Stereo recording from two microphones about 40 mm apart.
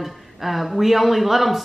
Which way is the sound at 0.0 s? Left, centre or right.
Centre.